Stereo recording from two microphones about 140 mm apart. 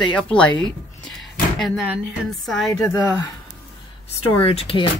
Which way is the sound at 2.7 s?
25° left (ahead or behind).